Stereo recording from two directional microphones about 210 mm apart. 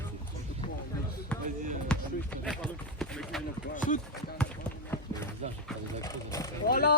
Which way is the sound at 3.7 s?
40° left (ahead or behind).